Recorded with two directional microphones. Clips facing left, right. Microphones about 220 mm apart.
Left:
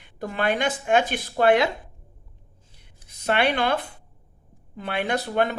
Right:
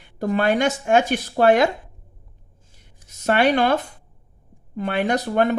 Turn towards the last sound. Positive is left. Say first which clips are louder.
# right 4 dB
turn(degrees=-45)  # may be behind; listen again after turning